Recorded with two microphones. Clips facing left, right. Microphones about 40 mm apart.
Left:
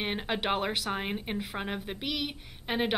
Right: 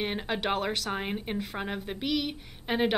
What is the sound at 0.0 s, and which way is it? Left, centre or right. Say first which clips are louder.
A woman's voice: right 1 dB; centre.